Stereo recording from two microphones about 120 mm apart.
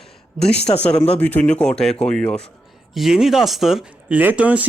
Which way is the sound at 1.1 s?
10° left (ahead or behind).